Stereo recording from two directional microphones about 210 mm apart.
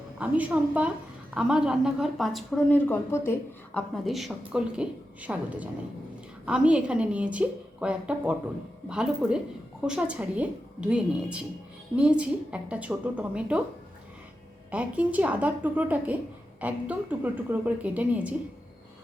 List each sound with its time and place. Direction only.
0.2 s a woman's voice: 5° right (ahead or behind)
14.7 s a woman's voice: 5° right (ahead or behind)